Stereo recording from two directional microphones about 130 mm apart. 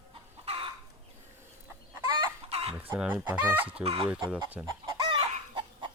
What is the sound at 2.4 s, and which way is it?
Chicken, 50° right (ahead or behind).